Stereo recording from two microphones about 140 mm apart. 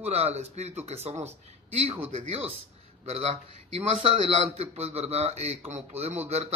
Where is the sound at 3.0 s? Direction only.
45° right (ahead or behind).